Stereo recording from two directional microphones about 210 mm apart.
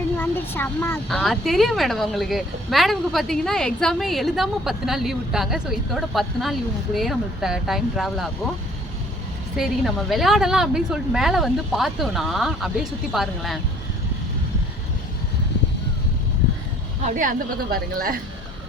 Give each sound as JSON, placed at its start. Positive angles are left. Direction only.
{"t": 0.2, "sound": "speech", "side_deg": 10}
{"t": 9.6, "sound": "speech", "side_deg": 0}
{"t": 17.2, "sound": "a woman's voice", "side_deg": -40}